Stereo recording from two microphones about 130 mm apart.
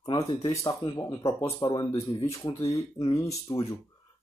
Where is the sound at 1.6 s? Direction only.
35° left (ahead or behind).